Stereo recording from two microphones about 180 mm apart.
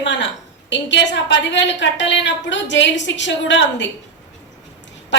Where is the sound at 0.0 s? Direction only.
85° left.